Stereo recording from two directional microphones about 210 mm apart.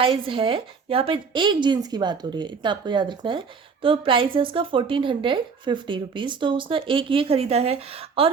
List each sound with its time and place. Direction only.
0.0 s speech: 25° right (ahead or behind)